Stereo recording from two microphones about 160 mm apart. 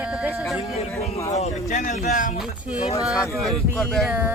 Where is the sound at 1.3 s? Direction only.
45° left (ahead or behind).